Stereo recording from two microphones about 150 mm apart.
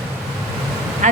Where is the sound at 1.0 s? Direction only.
55° right (ahead or behind).